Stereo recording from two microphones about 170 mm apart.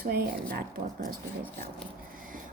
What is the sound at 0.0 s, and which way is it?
Speech, 65° right (ahead or behind).